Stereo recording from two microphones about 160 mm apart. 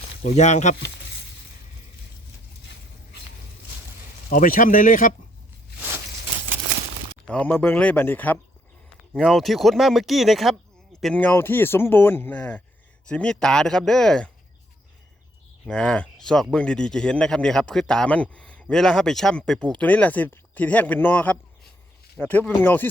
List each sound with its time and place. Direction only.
0.3 s speech: 45° left (ahead or behind)
4.3 s speech: 60° left (ahead or behind)
7.3 s speech: 10° left (ahead or behind)
9.1 s a man's voice: centre (ahead or behind)
11.0 s a man's voice: 10° left (ahead or behind)
15.6 s a man's voice: 5° left (ahead or behind)